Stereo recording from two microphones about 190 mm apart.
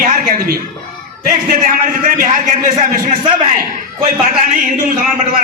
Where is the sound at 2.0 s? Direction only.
45° right (ahead or behind).